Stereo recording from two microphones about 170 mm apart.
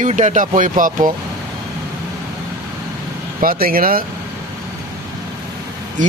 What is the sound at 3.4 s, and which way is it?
Speech, 60° right (ahead or behind).